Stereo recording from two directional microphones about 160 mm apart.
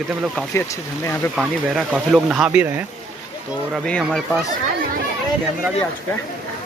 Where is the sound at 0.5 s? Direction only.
15° left (ahead or behind).